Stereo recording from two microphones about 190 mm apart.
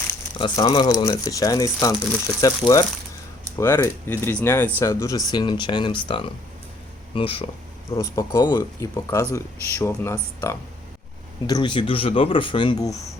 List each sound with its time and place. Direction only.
0.3 s speech: 25° left (ahead or behind)
7.9 s speech: 15° left (ahead or behind)